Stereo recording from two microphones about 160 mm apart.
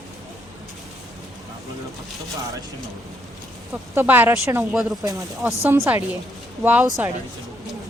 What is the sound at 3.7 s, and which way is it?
A woman's voice, 15° right (ahead or behind).